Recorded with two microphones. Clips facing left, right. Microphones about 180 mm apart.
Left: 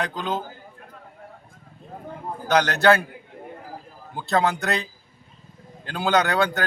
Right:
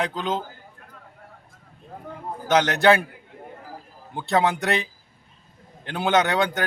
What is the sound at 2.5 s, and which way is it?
Speech, 20° right (ahead or behind).